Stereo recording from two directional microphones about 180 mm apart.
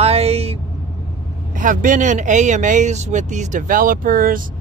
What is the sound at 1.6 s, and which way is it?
Speech, 45° right (ahead or behind).